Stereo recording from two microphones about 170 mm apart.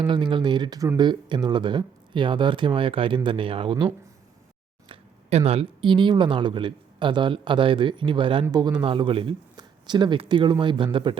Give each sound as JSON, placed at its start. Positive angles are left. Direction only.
{"t": 0.1, "sound": "speech", "side_deg": -30}